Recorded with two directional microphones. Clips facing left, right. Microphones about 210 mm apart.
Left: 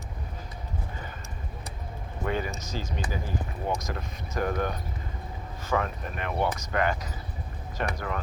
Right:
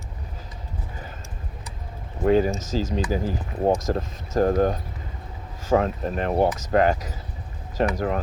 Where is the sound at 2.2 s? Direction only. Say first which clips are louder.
Right 11 dB; 40° right (ahead or behind).